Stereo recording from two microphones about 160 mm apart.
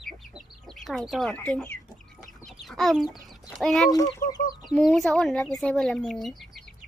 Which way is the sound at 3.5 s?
Centre (ahead or behind).